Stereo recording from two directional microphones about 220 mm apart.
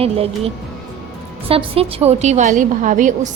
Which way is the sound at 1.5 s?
25° right (ahead or behind).